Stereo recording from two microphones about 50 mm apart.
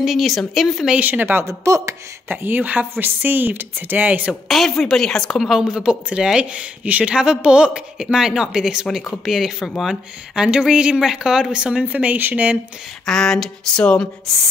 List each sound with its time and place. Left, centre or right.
0.0 s speech: centre
0.9 s a woman's voice: right
1.6 s speech: right
2.4 s a woman's voice: right
4.3 s a woman's voice: centre
5.4 s speech: centre
5.7 s a woman's voice: centre
10.3 s a woman's voice: centre
13.0 s a woman's voice: centre